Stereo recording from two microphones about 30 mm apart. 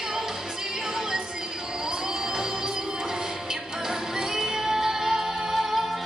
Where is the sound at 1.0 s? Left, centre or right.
Right.